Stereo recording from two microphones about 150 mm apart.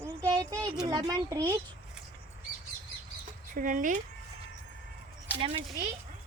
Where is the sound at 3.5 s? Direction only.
60° right (ahead or behind).